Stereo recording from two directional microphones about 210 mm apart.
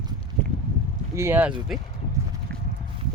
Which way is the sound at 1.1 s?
10° right (ahead or behind).